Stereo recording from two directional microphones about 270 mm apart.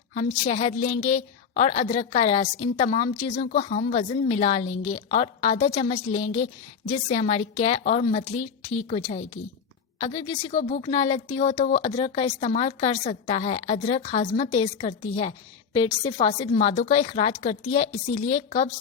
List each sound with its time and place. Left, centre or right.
0.1 s a woman's voice: left